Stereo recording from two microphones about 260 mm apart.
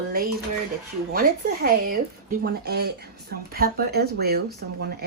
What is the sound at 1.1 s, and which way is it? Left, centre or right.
Speech, right.